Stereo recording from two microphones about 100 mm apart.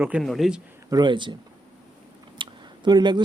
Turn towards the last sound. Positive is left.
turn(degrees=-50)  # may be behind; listen again after turning